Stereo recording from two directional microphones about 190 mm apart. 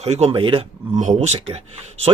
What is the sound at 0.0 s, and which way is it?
Speech, 35° right (ahead or behind).